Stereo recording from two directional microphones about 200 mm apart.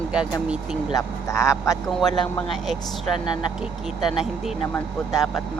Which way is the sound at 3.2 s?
5° right (ahead or behind).